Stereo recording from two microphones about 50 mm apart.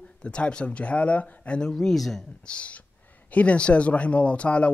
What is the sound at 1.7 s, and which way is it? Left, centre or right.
Speech, centre.